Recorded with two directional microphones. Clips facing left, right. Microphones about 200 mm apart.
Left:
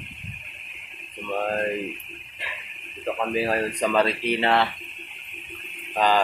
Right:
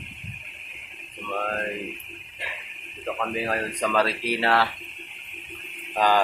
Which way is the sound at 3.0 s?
15° left (ahead or behind).